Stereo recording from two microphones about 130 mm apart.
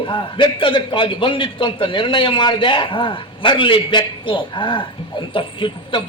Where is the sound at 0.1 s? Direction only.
40° left (ahead or behind).